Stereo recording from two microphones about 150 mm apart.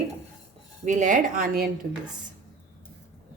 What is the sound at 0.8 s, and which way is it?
Speech, 55° right (ahead or behind).